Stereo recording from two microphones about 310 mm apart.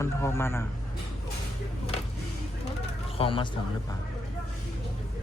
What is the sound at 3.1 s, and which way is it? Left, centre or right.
Speech, centre.